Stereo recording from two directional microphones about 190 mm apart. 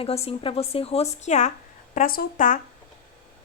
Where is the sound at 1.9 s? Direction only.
50° left (ahead or behind).